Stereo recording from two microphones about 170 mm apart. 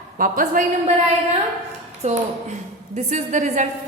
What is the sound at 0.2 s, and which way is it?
Speech, 55° right (ahead or behind).